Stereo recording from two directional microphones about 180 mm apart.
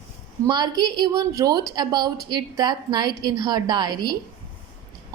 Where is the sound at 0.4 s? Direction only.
25° right (ahead or behind).